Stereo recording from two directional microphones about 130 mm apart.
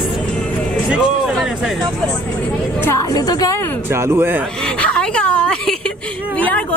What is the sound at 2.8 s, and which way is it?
Speech, 25° left (ahead or behind).